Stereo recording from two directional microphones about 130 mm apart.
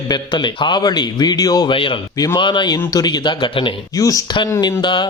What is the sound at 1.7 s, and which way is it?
Speech, 40° left (ahead or behind).